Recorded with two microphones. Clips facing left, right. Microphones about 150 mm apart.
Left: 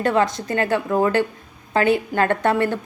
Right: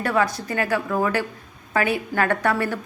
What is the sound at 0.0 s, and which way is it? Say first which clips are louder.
A woman's voice: left 3 dB; 25° left (ahead or behind).